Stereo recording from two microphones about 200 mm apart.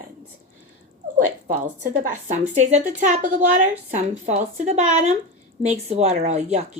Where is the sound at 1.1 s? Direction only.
35° right (ahead or behind).